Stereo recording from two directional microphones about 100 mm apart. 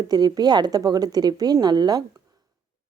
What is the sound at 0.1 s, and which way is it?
Speech, 45° right (ahead or behind).